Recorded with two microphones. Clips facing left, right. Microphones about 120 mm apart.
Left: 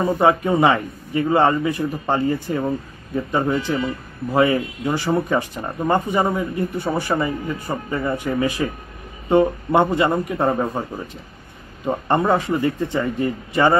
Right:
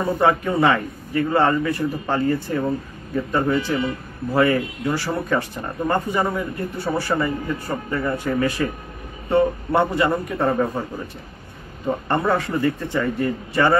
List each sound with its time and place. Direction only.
0.2 s speech: 20° left (ahead or behind)
11.8 s speech: 15° left (ahead or behind)